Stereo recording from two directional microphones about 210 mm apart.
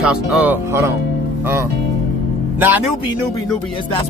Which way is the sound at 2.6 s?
10° right (ahead or behind).